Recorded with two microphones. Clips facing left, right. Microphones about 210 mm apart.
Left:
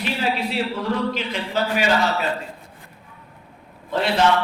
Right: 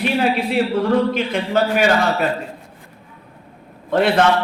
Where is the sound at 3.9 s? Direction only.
55° right (ahead or behind).